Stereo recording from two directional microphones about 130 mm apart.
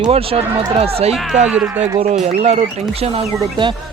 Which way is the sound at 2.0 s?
60° right (ahead or behind).